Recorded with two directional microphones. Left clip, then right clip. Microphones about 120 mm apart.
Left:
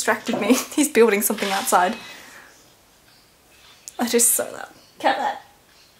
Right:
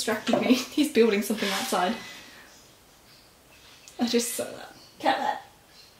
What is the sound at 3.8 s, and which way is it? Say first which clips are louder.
Speech: left 5 dB; 25° left (ahead or behind).